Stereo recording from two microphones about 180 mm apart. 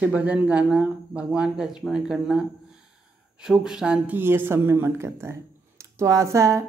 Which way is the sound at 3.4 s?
5° right (ahead or behind).